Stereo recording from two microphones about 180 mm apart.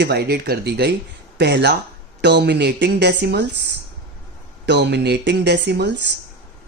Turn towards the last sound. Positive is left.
turn(degrees=-75)  # may be behind; listen again after turning